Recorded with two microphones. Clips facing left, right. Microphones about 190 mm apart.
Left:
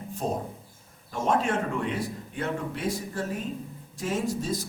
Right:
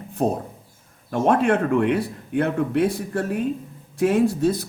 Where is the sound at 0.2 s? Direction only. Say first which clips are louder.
Right 8 dB; 60° right (ahead or behind).